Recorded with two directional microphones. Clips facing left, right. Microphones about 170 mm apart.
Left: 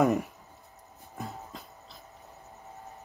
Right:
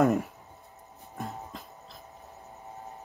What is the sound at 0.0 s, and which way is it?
Speech, centre (ahead or behind).